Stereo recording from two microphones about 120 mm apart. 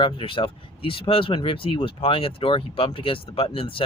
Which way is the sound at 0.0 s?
45° left (ahead or behind).